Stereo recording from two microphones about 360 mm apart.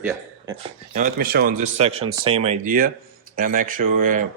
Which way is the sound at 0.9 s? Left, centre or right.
Right.